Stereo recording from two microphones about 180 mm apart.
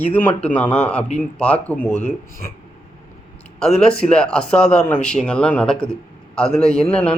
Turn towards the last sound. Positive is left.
turn(degrees=5)  # may be behind; listen again after turning